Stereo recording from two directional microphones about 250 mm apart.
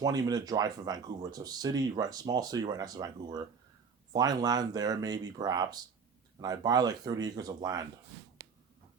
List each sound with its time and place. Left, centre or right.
0.0 s speech: centre